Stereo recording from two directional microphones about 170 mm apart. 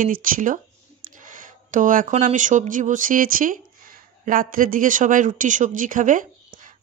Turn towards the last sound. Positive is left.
turn(degrees=-50)  # may be behind; listen again after turning